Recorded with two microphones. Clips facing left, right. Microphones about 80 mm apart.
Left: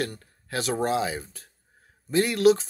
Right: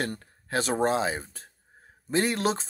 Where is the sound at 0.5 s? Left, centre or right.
Right.